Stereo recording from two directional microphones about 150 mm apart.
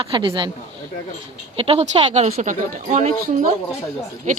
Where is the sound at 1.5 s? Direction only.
40° right (ahead or behind).